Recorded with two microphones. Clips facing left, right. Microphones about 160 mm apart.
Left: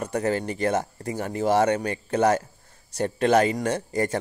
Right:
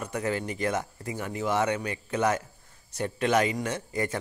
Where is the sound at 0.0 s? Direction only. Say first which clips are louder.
Left 5 dB; 40° left (ahead or behind).